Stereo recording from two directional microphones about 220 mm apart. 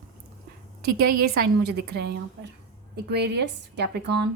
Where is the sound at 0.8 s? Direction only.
45° right (ahead or behind).